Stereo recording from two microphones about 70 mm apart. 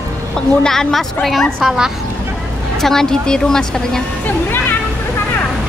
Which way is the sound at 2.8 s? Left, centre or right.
Centre.